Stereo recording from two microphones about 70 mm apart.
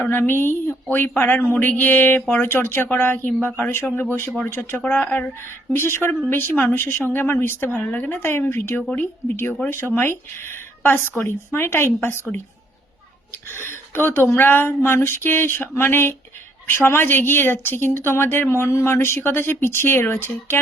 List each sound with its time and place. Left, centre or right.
0.0 s speech: left
4.8 s speech: left
13.5 s speech: left